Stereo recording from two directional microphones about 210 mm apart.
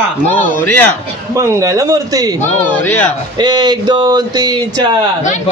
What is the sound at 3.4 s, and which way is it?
Speech, 20° right (ahead or behind).